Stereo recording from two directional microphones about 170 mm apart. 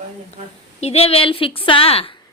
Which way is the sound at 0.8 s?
35° left (ahead or behind).